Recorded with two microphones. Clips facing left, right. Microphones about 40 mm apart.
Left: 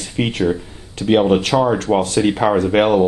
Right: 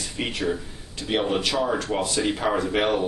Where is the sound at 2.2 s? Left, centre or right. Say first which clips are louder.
Left 8 dB; left.